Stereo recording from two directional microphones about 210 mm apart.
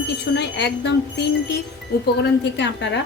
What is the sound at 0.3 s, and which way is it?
Speech, 55° left (ahead or behind).